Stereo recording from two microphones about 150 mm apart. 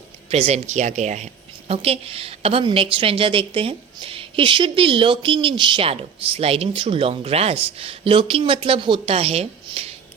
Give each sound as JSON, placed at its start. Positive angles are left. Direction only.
{"t": 0.3, "sound": "a woman's voice", "side_deg": -40}